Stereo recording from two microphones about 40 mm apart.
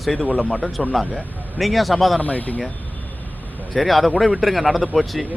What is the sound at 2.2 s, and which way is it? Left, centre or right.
Speech, left.